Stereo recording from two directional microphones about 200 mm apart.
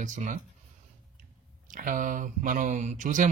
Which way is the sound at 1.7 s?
40° right (ahead or behind).